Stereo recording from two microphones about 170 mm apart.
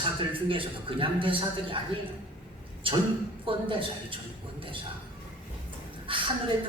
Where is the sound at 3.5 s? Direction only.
30° right (ahead or behind).